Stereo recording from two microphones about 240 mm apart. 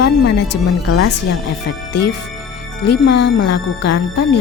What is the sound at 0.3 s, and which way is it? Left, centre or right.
Speech, left.